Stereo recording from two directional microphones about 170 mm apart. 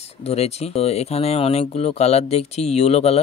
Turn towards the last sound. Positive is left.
turn(degrees=40)  # may be behind; listen again after turning